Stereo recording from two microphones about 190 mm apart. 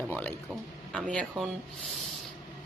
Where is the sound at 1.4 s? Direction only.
Centre (ahead or behind).